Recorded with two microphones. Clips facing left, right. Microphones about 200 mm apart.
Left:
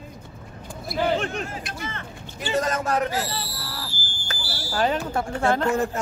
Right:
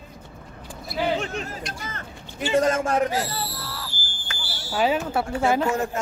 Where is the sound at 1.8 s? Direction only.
40° right (ahead or behind).